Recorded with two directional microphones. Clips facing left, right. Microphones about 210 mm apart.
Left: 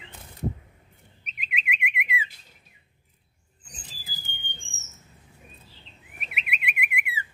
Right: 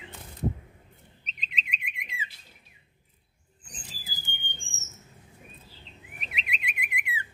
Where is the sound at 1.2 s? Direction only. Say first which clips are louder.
Left 7 dB; 10° left (ahead or behind).